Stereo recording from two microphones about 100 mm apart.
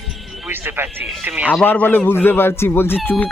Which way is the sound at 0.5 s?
20° right (ahead or behind).